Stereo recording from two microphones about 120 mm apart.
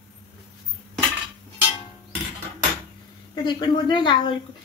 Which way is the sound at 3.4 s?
40° left (ahead or behind).